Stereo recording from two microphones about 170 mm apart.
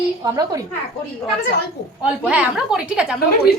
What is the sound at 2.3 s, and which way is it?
Speech, 5° right (ahead or behind).